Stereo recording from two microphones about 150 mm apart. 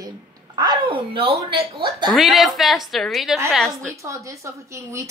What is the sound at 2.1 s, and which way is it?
A woman's voice, centre (ahead or behind).